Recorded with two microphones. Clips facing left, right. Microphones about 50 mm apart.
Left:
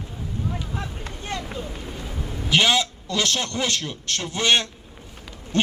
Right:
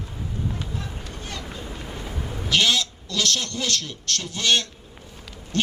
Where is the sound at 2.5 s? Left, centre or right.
Left.